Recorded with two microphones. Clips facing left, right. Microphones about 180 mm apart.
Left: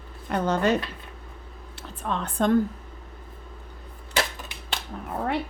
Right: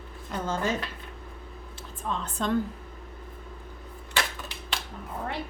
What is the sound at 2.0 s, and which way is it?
Speech, 65° left (ahead or behind).